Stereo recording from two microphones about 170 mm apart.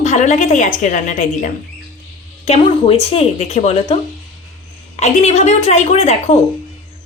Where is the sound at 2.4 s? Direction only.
35° left (ahead or behind).